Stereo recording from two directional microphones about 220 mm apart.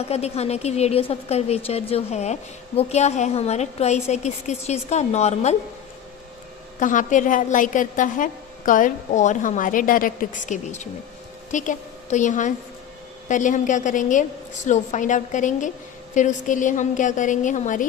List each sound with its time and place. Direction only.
0.0 s a woman's voice: 30° left (ahead or behind)
6.7 s a woman's voice: 35° left (ahead or behind)